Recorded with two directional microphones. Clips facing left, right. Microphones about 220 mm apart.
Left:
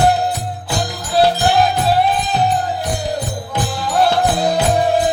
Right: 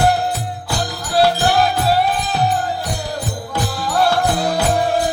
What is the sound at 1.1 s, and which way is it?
Music, 20° left (ahead or behind).